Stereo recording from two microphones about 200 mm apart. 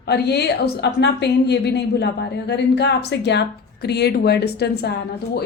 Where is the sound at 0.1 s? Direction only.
55° left (ahead or behind).